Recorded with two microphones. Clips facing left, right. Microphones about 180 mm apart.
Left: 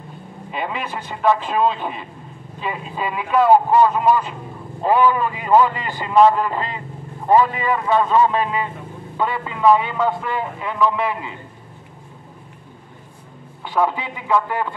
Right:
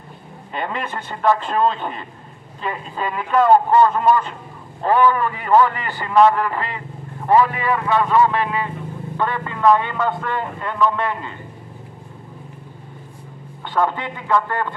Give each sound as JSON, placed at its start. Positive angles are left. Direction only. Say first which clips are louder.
{"t": 0.5, "sound": "a man's voice", "louder": "even", "side_deg": 5}
{"t": 13.7, "sound": "a man's voice", "louder": "even", "side_deg": 10}